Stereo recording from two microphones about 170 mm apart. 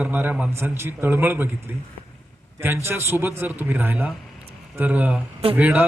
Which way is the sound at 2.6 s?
15° right (ahead or behind).